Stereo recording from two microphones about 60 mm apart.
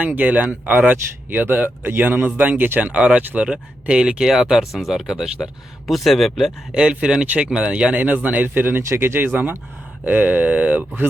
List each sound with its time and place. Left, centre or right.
0.0 s speech: right
2.9 s speech: centre
5.9 s speech: centre
6.7 s speech: centre